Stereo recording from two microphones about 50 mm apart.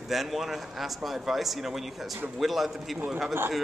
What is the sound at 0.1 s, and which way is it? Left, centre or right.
Speech, centre.